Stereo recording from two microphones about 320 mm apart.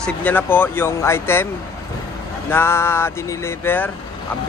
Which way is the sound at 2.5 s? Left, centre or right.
Centre.